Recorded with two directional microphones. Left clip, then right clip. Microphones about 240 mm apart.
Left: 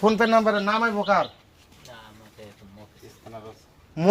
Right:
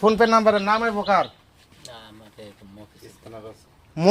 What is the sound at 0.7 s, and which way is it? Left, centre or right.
Speech, centre.